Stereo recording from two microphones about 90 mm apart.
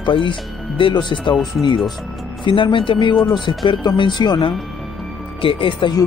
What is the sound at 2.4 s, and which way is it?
Speech, 70° left (ahead or behind).